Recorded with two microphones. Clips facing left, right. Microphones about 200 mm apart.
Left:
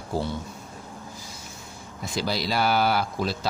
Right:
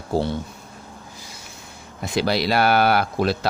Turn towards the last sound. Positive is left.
turn(degrees=-65)  # may be behind; listen again after turning